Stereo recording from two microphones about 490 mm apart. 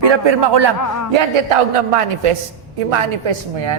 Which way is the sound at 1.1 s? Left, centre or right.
Right.